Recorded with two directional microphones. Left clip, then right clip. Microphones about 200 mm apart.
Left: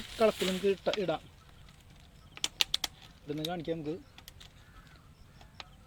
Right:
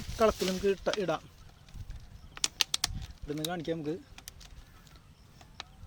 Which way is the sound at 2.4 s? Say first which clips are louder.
Right 1 dB; 40° right (ahead or behind).